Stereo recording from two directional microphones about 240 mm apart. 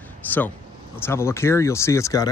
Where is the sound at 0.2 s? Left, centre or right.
Centre.